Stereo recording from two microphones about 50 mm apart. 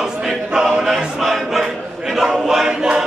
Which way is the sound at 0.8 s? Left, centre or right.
Centre.